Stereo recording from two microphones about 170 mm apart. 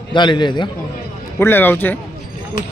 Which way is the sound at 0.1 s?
25° left (ahead or behind).